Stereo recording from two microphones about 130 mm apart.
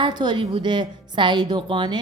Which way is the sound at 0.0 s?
35° right (ahead or behind).